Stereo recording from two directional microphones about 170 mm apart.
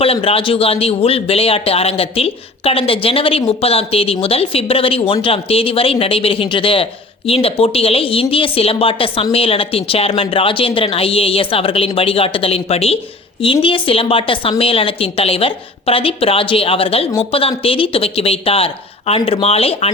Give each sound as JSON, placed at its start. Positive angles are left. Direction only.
{"t": 0.0, "sound": "speech", "side_deg": 35}